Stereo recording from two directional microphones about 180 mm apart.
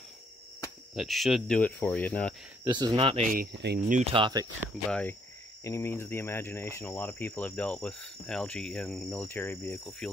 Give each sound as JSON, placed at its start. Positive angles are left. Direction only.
{"t": 0.9, "sound": "speech", "side_deg": 0}
{"t": 2.6, "sound": "speech", "side_deg": -20}
{"t": 3.3, "sound": "cricket", "side_deg": -60}
{"t": 3.9, "sound": "speech", "side_deg": -30}
{"t": 4.8, "sound": "cricket", "side_deg": 5}
{"t": 5.6, "sound": "cricket", "side_deg": 15}
{"t": 9.2, "sound": "cricket", "side_deg": 15}
{"t": 9.8, "sound": "speech", "side_deg": 0}